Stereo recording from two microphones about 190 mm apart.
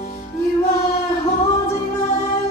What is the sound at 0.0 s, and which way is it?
Music, 35° left (ahead or behind).